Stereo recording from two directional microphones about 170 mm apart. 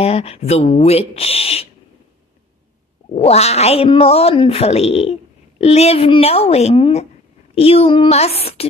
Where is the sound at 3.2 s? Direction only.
40° left (ahead or behind).